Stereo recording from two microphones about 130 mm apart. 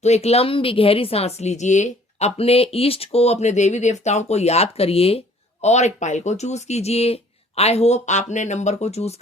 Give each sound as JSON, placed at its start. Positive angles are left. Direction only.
{"t": 0.0, "sound": "speech", "side_deg": 55}
{"t": 3.4, "sound": "speech", "side_deg": 65}
{"t": 5.6, "sound": "speech", "side_deg": 60}